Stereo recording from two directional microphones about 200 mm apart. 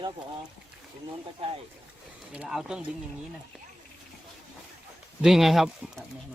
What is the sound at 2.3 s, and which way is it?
Speech, 5° right (ahead or behind).